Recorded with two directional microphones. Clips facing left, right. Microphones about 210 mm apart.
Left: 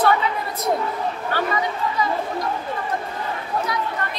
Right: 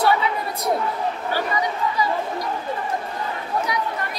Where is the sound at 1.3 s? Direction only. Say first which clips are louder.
Left 2 dB; 10° right (ahead or behind).